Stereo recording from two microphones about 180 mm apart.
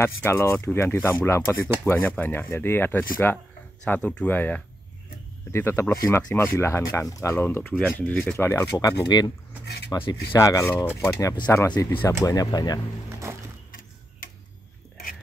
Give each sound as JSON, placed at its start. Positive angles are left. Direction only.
{"t": 0.0, "sound": "speech", "side_deg": 15}